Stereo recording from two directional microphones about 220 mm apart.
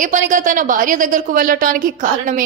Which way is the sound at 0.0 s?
35° right (ahead or behind).